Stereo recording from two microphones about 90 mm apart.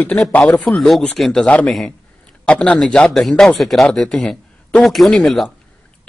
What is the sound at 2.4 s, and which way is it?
Speech, 15° left (ahead or behind).